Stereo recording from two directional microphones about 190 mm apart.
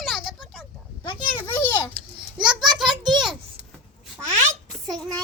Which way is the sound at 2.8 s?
25° right (ahead or behind).